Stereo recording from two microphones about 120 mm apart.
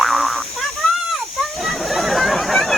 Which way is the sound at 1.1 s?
Centre (ahead or behind).